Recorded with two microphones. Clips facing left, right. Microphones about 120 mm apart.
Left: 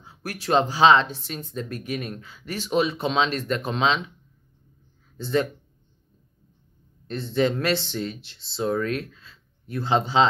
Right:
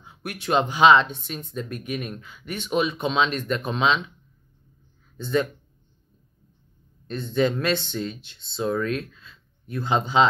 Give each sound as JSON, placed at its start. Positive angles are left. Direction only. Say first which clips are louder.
{"t": 0.0, "sound": "speech", "louder": "even", "side_deg": 35}
{"t": 1.1, "sound": "speech", "louder": "even", "side_deg": -25}
{"t": 1.4, "sound": "speech", "louder": "even", "side_deg": 30}
{"t": 5.1, "sound": "speech", "louder": "even", "side_deg": 30}
{"t": 7.1, "sound": "speech", "louder": "even", "side_deg": 30}